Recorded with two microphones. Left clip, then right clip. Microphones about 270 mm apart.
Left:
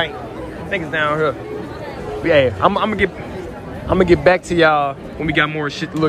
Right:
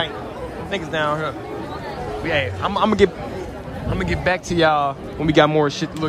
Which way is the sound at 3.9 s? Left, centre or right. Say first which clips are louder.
Left 9 dB; centre.